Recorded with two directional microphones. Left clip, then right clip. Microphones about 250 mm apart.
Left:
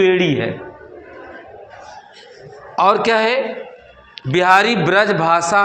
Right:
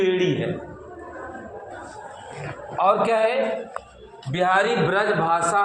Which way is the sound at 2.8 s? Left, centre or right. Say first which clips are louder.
Left 5 dB; left.